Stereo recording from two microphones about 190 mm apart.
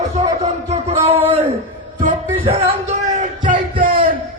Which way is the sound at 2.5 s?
35° right (ahead or behind).